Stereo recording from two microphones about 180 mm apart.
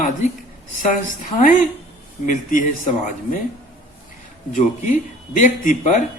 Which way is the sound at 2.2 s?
45° left (ahead or behind).